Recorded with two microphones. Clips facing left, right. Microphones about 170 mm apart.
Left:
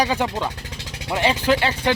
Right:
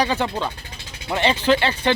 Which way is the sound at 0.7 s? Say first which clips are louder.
Left 4 dB; 80° left.